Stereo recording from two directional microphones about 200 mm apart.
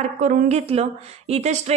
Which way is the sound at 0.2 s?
35° right (ahead or behind).